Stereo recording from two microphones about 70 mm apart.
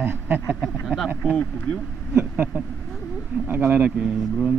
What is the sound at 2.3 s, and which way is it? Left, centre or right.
Speech, right.